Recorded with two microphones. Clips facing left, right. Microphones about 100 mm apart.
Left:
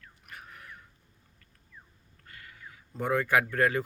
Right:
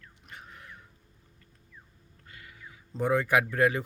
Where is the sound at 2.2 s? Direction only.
20° right (ahead or behind).